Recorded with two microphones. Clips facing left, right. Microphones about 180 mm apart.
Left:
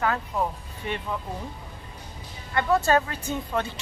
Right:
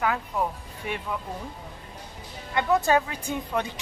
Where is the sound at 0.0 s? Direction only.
5° right (ahead or behind).